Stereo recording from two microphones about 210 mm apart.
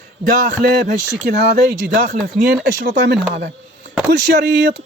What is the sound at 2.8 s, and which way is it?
Speech, 50° right (ahead or behind).